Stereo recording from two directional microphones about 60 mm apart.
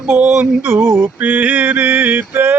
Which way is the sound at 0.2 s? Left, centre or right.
Centre.